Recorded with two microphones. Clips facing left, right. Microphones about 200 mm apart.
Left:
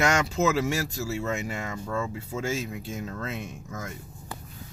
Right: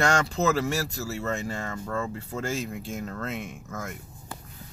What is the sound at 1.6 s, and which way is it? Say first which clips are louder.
Speech: even; 10° left (ahead or behind).